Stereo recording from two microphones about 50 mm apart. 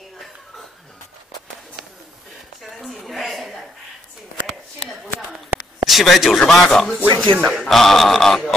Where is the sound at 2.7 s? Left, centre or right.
Centre.